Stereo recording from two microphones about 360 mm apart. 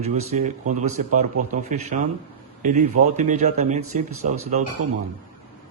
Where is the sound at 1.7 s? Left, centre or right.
Right.